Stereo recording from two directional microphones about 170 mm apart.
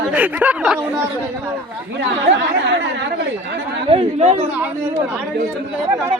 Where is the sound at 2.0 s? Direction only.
90° right.